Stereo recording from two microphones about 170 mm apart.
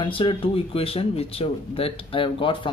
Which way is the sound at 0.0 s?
30° left (ahead or behind).